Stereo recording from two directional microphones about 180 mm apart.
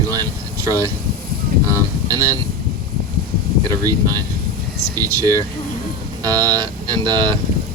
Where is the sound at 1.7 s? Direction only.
20° right (ahead or behind).